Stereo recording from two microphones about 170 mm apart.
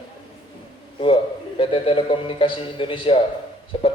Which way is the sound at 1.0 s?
30° left (ahead or behind).